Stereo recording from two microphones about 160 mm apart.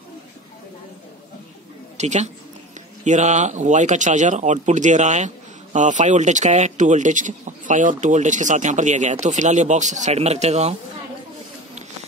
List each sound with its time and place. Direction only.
2.0 s a woman's voice: 45° right (ahead or behind)